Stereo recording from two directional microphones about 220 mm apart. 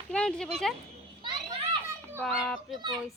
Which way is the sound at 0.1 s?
5° left (ahead or behind).